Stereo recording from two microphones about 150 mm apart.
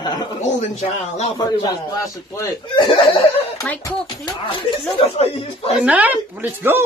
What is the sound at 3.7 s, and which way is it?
Speech, 10° left (ahead or behind).